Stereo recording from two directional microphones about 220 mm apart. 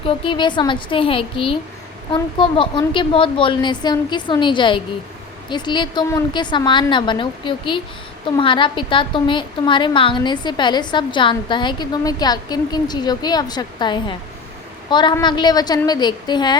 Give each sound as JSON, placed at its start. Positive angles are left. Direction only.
{"t": 0.3, "sound": "a woman's voice", "side_deg": 20}